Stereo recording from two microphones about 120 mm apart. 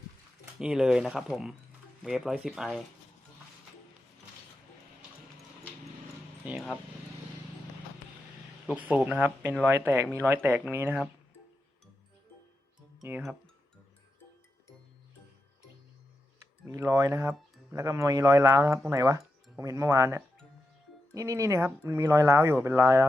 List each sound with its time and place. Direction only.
0.6 s speech: 5° right (ahead or behind)
8.9 s speech: 10° right (ahead or behind)
16.6 s speech: 25° right (ahead or behind)